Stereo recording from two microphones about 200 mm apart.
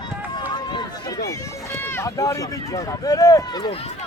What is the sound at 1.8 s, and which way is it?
Speech, 10° left (ahead or behind).